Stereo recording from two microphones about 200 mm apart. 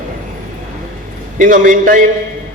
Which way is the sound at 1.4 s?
40° right (ahead or behind).